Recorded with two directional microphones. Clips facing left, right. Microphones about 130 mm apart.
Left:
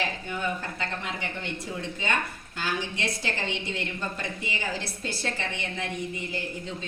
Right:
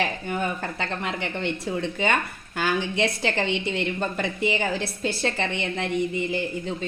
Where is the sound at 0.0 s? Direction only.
55° right (ahead or behind).